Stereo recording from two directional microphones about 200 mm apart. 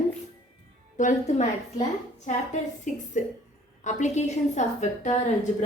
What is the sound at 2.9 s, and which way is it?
A woman's voice, 40° left (ahead or behind).